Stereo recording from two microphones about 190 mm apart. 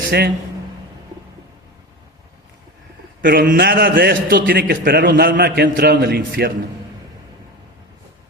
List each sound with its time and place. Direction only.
0.1 s a man's voice: 60° right (ahead or behind)
3.2 s a man's voice: 45° right (ahead or behind)